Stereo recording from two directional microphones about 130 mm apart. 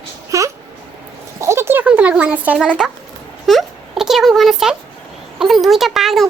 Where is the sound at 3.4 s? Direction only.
Centre (ahead or behind).